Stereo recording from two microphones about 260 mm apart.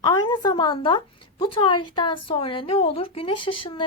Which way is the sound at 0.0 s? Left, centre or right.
Centre.